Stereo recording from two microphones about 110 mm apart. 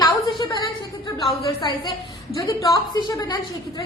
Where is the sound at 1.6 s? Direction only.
45° left (ahead or behind).